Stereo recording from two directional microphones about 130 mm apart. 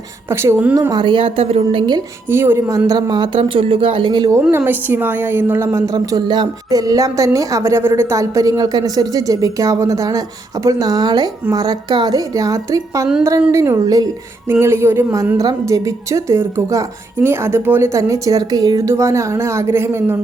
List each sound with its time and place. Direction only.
0.3 s a woman's voice: 20° right (ahead or behind)
0.8 s speech: 30° right (ahead or behind); by 1.8 s 50° right (ahead or behind)
2.3 s speech: 20° right (ahead or behind); by 4.3 s 35° right (ahead or behind)
4.5 s a woman's voice: 15° right (ahead or behind)